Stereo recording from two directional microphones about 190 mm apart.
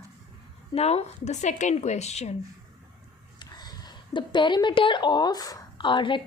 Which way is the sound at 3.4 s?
20° left (ahead or behind).